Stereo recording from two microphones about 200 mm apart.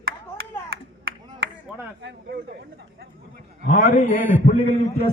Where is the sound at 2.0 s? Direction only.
60° right (ahead or behind).